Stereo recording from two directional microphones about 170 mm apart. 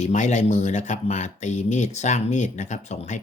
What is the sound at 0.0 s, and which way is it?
Speech, 45° left (ahead or behind).